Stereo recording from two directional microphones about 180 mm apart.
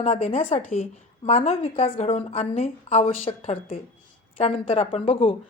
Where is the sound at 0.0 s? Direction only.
35° left (ahead or behind).